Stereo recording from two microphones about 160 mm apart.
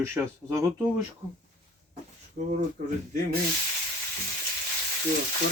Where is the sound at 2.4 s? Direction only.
60° right (ahead or behind).